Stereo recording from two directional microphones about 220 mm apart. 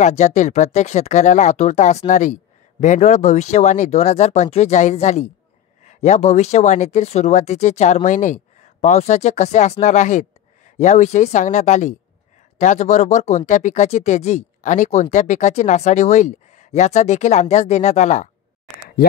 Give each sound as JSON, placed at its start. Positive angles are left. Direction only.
{"t": 0.0, "sound": "speech", "side_deg": 30}